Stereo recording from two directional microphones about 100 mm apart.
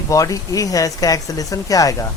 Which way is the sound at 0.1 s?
35° left (ahead or behind).